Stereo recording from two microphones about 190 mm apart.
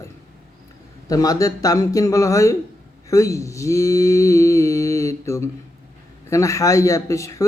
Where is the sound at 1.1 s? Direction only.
20° left (ahead or behind).